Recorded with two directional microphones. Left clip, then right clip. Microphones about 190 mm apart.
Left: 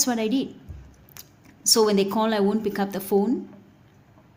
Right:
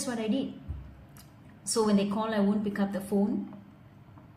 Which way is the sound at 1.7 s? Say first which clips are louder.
Left 8 dB; 65° left (ahead or behind).